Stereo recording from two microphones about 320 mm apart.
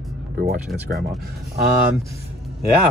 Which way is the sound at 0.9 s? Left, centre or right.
Right.